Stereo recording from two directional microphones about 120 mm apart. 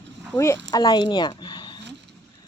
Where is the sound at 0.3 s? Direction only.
25° left (ahead or behind).